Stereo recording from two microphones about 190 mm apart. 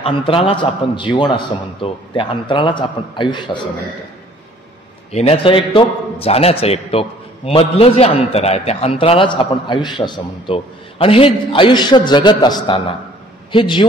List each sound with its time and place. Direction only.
0.0 s a man's voice: 30° left (ahead or behind)
5.1 s a man's voice: 30° left (ahead or behind)